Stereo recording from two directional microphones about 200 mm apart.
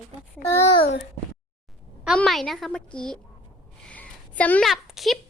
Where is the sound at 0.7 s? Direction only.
25° left (ahead or behind).